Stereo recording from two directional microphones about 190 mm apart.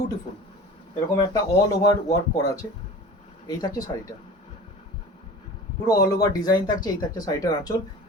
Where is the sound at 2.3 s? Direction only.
20° left (ahead or behind).